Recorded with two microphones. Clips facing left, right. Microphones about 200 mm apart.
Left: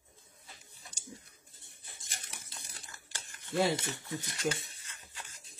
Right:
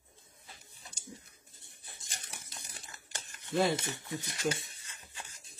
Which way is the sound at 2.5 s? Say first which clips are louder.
Right 1 dB; 20° right (ahead or behind).